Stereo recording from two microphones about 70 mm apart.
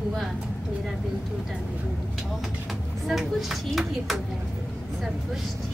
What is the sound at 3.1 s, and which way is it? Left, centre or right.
Speech, centre.